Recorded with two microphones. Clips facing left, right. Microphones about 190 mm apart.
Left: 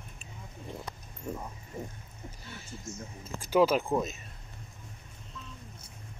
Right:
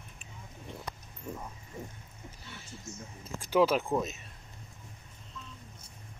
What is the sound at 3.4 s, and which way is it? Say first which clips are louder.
Speech: left 1 dB; centre (ahead or behind).